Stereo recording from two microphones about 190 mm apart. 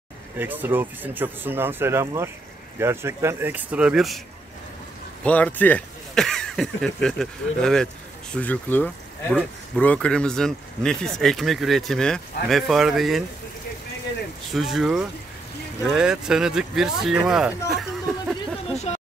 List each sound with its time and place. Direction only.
0.4 s speech: 10° right (ahead or behind)
5.2 s speech: 10° left (ahead or behind)
14.5 s speech: centre (ahead or behind)
18.9 s a sound: 35° left (ahead or behind)